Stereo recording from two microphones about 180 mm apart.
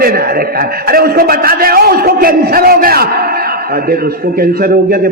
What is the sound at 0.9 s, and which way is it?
A man's voice, 55° right (ahead or behind).